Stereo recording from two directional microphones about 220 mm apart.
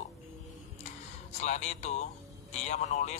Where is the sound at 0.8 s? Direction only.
30° left (ahead or behind).